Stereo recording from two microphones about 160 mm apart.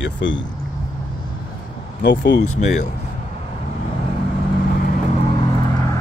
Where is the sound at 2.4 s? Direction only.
45° left (ahead or behind).